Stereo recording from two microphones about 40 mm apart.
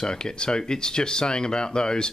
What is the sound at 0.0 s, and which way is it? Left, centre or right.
A man's voice, centre.